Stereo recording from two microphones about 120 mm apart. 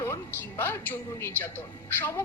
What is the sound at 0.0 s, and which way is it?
A woman's voice, 20° left (ahead or behind).